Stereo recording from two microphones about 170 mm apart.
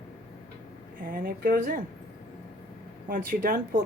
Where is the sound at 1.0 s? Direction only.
55° right (ahead or behind).